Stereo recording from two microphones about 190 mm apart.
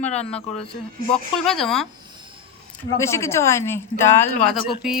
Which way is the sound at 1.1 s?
5° left (ahead or behind).